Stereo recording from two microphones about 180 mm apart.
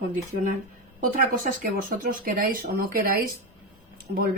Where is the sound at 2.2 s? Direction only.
55° right (ahead or behind).